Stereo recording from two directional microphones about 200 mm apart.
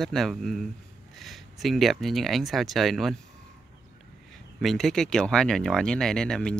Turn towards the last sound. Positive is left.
turn(degrees=5)  # may be behind; listen again after turning